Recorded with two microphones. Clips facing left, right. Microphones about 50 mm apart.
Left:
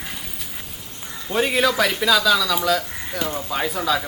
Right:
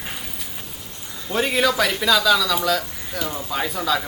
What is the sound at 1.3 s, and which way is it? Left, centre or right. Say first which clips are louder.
Speech: left 1 dB; centre.